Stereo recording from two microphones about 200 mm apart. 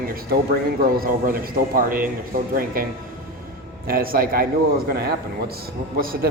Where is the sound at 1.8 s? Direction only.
45° right (ahead or behind).